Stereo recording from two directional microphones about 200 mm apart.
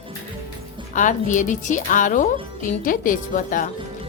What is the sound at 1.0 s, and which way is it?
Speech, 40° left (ahead or behind).